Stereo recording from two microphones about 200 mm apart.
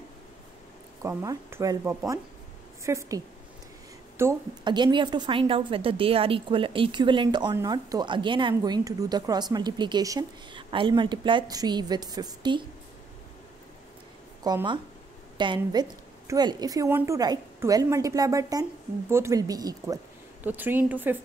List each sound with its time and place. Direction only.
1.0 s a woman's voice: 15° right (ahead or behind)
4.2 s a woman's voice: 20° right (ahead or behind)
14.4 s a woman's voice: 20° right (ahead or behind)